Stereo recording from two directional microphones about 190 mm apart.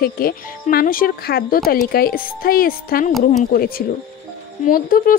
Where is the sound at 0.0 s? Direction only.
50° left (ahead or behind).